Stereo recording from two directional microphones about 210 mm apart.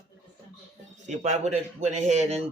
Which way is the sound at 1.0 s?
35° right (ahead or behind).